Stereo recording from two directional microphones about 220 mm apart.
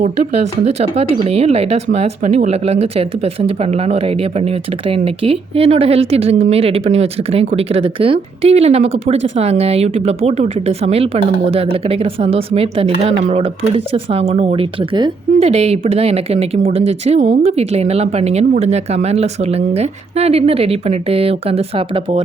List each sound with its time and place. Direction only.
0.0 s speech: 30° right (ahead or behind)